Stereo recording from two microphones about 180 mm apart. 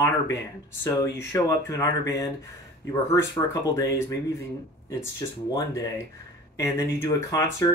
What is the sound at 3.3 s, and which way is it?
Speech, 20° left (ahead or behind).